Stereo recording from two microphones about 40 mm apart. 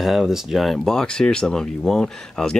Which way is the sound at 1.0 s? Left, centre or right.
Centre.